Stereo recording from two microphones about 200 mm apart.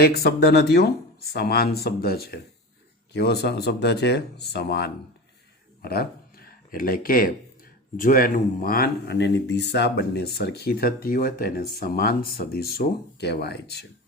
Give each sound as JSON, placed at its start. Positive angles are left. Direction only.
{"t": 0.0, "sound": "speech", "side_deg": 50}